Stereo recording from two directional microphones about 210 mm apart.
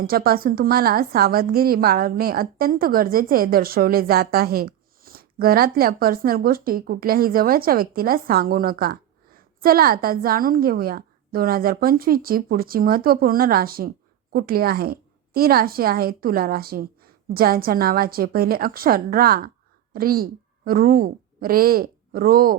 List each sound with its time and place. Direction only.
0.1 s a woman's voice: 45° right (ahead or behind)